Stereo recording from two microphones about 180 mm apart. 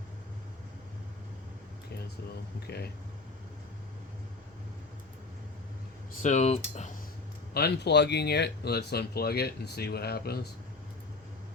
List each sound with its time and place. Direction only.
2.6 s speech: 60° left (ahead or behind)
6.2 s speech: 40° left (ahead or behind)
7.5 s speech: 65° left (ahead or behind)